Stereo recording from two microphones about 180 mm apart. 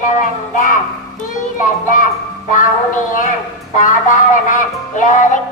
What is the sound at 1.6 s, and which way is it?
Music, 45° left (ahead or behind).